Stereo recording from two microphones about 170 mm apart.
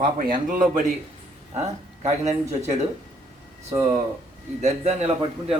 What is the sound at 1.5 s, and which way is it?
Speech, 40° right (ahead or behind).